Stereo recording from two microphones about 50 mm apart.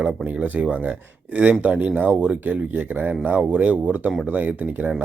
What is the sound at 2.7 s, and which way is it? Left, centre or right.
Speech, right.